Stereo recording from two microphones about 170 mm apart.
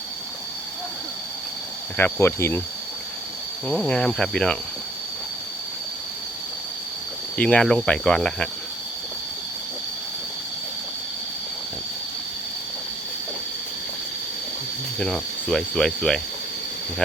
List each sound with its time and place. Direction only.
2.0 s speech: 15° left (ahead or behind)
3.7 s speech: 5° left (ahead or behind)
7.3 s speech: 5° left (ahead or behind)
14.9 s speech: 5° left (ahead or behind)